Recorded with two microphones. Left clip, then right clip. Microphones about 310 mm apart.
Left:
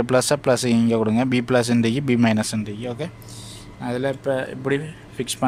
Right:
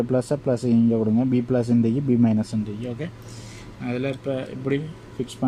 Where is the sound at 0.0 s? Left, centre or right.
Left.